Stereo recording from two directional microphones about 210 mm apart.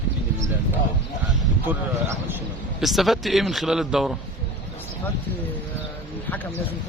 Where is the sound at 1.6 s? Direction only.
10° right (ahead or behind).